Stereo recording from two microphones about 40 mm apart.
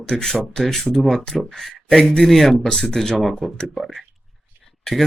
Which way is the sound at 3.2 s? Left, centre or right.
Centre.